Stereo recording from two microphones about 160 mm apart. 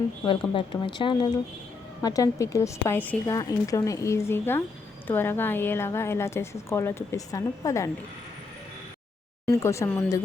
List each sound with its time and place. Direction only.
0.3 s a woman's voice: 30° left (ahead or behind)
9.5 s a woman's voice: 20° left (ahead or behind)